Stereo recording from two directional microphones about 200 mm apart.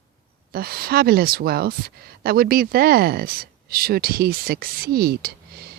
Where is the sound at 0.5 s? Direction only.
50° right (ahead or behind).